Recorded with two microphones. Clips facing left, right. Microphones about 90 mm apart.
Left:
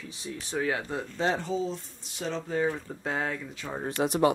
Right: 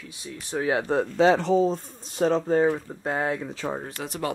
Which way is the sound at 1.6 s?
50° right (ahead or behind).